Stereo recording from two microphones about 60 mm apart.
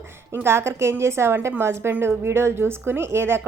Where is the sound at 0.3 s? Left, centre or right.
Right.